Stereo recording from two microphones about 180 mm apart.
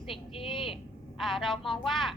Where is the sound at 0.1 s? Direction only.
30° left (ahead or behind).